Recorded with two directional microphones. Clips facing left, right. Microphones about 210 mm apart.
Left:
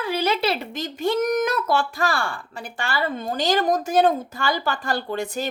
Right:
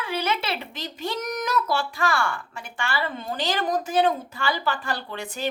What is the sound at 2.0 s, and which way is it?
A woman's voice, 35° left (ahead or behind).